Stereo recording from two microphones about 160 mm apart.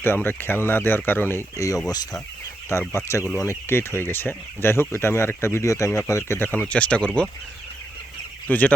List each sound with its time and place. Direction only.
0.0 s speech: 15° left (ahead or behind)
2.9 s speech: 15° left (ahead or behind)
8.4 s speech: 10° left (ahead or behind)